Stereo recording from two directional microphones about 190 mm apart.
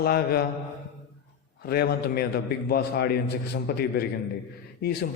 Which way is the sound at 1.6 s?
55° left (ahead or behind).